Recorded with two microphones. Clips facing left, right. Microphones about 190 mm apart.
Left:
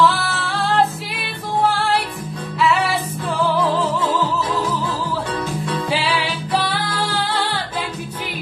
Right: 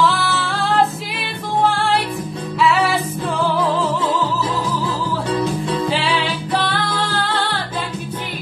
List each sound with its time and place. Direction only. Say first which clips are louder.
0.0 s female singing: even; centre (ahead or behind)
1.7 s music: right 1 dB; centre (ahead or behind)
6.5 s music: even; 10° left (ahead or behind)